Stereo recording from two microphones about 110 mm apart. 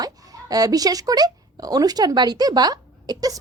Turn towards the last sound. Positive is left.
turn(degrees=-35)  # may be behind; listen again after turning